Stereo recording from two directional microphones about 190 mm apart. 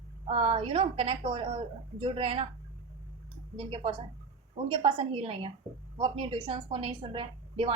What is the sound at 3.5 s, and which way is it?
A woman's voice, 25° right (ahead or behind).